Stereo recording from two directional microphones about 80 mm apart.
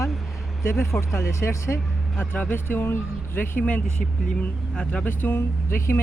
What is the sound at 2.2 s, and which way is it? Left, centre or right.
Speech, left.